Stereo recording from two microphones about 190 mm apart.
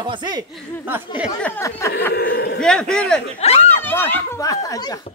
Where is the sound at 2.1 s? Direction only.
60° left (ahead or behind).